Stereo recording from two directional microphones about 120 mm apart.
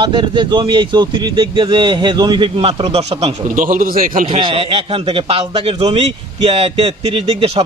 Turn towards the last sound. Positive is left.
turn(degrees=-50)  # may be behind; listen again after turning